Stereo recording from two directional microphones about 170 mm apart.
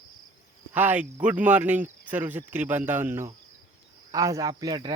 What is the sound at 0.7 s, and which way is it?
Speech, 10° right (ahead or behind).